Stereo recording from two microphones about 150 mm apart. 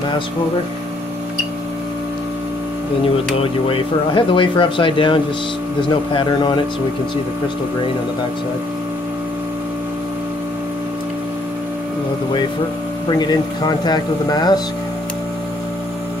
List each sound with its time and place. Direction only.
3.6 s speech: 35° left (ahead or behind)
13.2 s speech: 30° left (ahead or behind)